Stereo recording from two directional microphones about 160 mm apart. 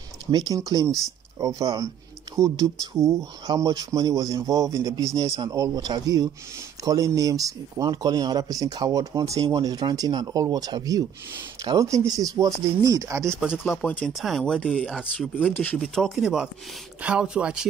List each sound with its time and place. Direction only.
0.3 s speech: 25° right (ahead or behind)
13.3 s speech: 5° right (ahead or behind)
13.7 s speech: 10° left (ahead or behind)